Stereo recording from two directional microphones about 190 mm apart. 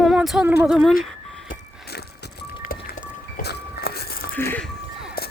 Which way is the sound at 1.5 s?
55° left (ahead or behind).